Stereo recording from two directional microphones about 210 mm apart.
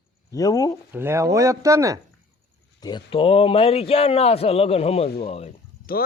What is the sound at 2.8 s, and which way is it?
A man's voice, 25° left (ahead or behind).